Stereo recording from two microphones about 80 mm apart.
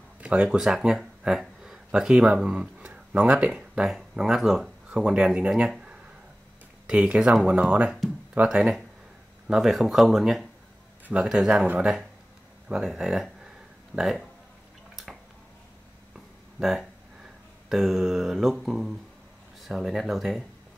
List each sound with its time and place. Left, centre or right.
0.2 s speech: centre
3.9 s mantra: centre
4.8 s speech: centre
6.9 s speech: centre
9.5 s mantra: centre
11.2 s speech: centre
13.9 s mantra: centre
16.5 s speech: centre
17.6 s mantra: centre